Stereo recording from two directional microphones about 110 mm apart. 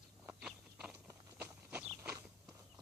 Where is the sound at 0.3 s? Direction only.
10° right (ahead or behind).